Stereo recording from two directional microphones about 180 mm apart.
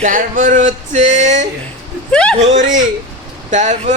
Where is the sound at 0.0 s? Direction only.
50° right (ahead or behind).